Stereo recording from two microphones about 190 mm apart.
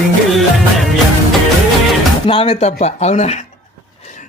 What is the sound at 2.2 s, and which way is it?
Speech, 30° left (ahead or behind).